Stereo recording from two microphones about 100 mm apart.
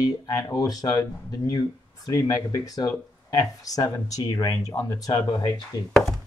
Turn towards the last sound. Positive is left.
turn(degrees=40)  # may be behind; listen again after turning